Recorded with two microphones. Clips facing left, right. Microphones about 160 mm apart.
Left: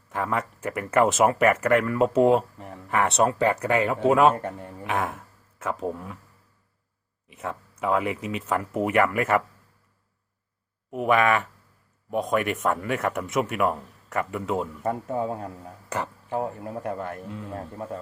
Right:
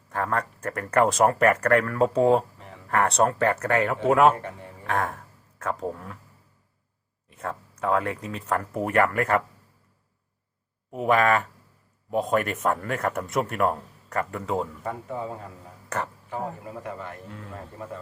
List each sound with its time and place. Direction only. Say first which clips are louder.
0.1 s speech: even; 5° left (ahead or behind)
3.3 s speech: left 1 dB; 15° left (ahead or behind)
7.3 s speech: even; 5° left (ahead or behind)
10.9 s speech: even; centre (ahead or behind)
14.8 s a man's voice: left 5 dB; 45° left (ahead or behind)
16.3 s a man's voice: left 6 dB; 55° left (ahead or behind)